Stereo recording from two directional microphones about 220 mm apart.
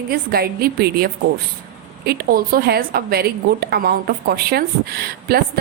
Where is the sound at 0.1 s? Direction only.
45° right (ahead or behind).